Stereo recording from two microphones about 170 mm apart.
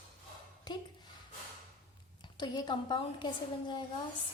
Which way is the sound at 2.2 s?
25° left (ahead or behind).